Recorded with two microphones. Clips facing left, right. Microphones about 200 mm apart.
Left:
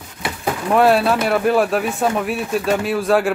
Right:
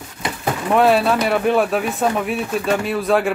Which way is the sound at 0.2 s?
Centre (ahead or behind).